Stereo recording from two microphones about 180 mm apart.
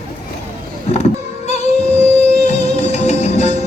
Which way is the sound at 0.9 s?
35° left (ahead or behind).